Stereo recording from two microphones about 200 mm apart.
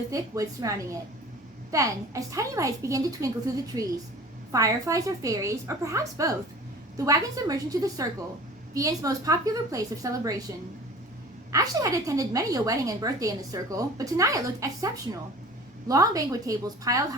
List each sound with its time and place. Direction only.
0.1 s a woman's voice: 15° right (ahead or behind)
11.5 s a woman's voice: 15° right (ahead or behind)
15.9 s a woman's voice: 15° right (ahead or behind)